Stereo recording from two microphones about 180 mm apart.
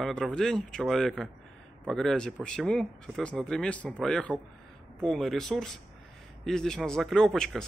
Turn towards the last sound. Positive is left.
turn(degrees=0)  # may be behind; listen again after turning